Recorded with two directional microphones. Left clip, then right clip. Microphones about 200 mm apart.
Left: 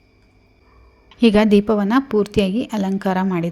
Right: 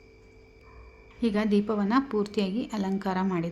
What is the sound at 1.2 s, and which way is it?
A woman's voice, 35° left (ahead or behind).